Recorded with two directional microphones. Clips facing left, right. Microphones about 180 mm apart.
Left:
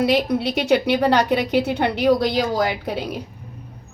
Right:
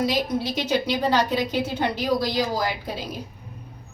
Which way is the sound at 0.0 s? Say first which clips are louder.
Left 5 dB; 65° left (ahead or behind).